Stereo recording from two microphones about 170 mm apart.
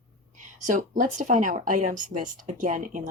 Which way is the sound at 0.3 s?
50° right (ahead or behind).